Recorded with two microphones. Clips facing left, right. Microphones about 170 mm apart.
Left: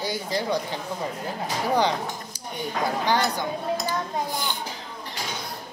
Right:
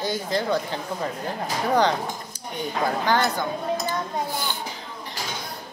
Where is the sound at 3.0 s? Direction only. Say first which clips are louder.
Right 1 dB; 15° left (ahead or behind).